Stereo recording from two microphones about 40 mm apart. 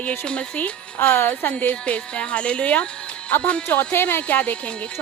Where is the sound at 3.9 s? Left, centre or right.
Left.